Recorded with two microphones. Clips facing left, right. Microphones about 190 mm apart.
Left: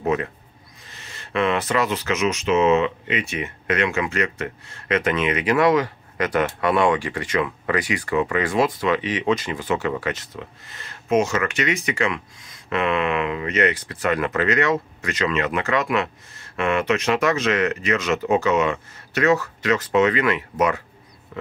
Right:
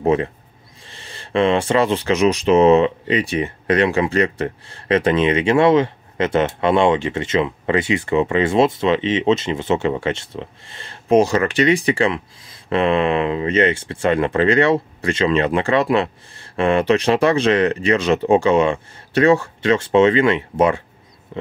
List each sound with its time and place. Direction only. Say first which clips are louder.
0.0 s speech: right 5 dB; 30° right (ahead or behind)